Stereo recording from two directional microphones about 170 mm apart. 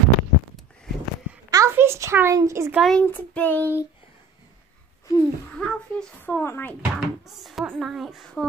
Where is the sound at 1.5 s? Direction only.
15° right (ahead or behind).